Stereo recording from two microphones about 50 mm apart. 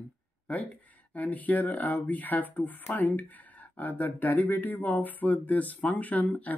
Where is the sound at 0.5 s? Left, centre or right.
Left.